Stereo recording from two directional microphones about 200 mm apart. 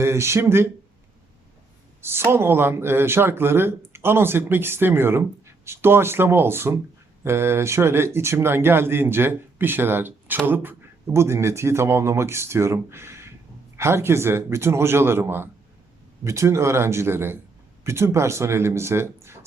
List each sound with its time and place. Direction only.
0.0 s speech: 15° right (ahead or behind)
2.0 s speech: 10° right (ahead or behind)